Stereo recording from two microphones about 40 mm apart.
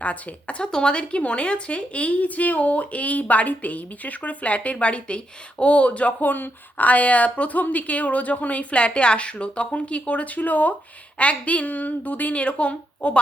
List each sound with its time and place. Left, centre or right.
0.0 s a woman's voice: left
0.7 s a woman's voice: left
6.8 s a woman's voice: left